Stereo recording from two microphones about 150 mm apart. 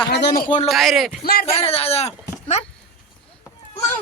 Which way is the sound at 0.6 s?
Centre (ahead or behind).